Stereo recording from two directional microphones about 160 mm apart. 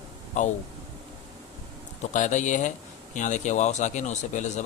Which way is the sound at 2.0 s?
50° left (ahead or behind).